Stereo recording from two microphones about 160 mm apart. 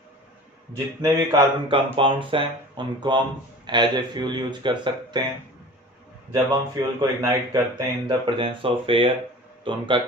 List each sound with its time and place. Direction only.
1.0 s speech: 20° right (ahead or behind)
6.3 s speech: 25° right (ahead or behind)
8.0 s speech: 35° right (ahead or behind)